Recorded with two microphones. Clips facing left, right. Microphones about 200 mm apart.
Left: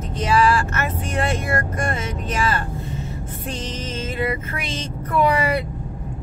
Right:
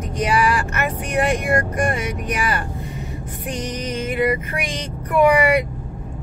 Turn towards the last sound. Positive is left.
turn(degrees=-15)  # may be behind; listen again after turning